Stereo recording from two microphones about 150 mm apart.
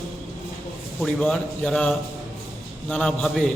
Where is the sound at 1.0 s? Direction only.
Centre (ahead or behind).